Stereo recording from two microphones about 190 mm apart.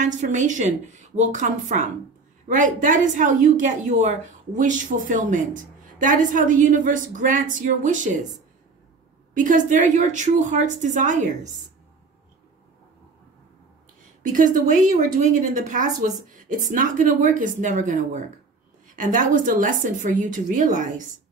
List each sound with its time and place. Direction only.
0.0 s a woman's voice: 40° right (ahead or behind)
9.3 s a woman's voice: 45° right (ahead or behind)
14.2 s a woman's voice: 45° right (ahead or behind)